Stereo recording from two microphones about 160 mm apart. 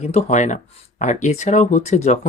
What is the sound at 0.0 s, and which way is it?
Speech, 45° left (ahead or behind).